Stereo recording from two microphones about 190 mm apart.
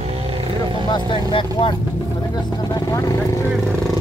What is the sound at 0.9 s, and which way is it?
Speech, 25° left (ahead or behind).